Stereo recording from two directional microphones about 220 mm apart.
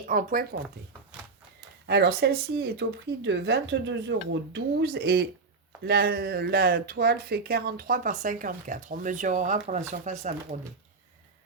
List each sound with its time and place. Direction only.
0.1 s speech: 35° right (ahead or behind)
1.9 s speech: 45° right (ahead or behind)